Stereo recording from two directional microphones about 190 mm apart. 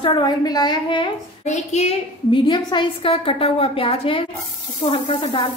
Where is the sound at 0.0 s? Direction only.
25° left (ahead or behind).